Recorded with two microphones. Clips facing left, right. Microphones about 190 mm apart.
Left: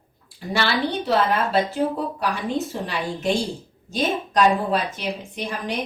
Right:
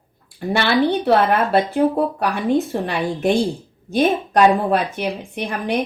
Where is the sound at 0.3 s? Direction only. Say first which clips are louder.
Right 6 dB; 55° right (ahead or behind).